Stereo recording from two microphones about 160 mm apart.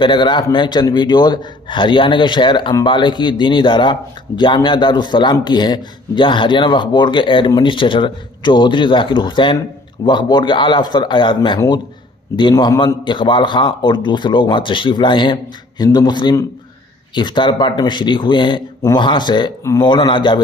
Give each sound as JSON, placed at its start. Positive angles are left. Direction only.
{"t": 0.0, "sound": "a man's voice", "side_deg": 30}